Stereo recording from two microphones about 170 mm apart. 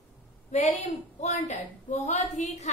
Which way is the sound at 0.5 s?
40° left (ahead or behind).